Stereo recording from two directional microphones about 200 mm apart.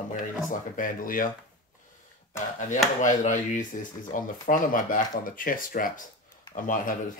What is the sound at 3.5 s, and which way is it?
Speech, 40° left (ahead or behind).